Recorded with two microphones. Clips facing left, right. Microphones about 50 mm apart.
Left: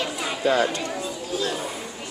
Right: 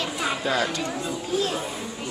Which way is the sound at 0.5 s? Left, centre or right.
Left.